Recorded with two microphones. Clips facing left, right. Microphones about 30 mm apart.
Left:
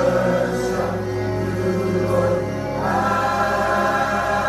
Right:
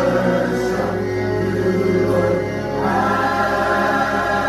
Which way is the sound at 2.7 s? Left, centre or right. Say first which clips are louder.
Right 2 dB; centre.